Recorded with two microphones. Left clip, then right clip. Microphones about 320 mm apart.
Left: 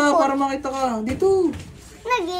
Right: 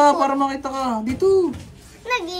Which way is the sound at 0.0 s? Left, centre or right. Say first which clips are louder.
Right 2 dB; centre.